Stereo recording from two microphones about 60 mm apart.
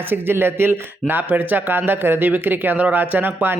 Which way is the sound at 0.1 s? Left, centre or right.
Right.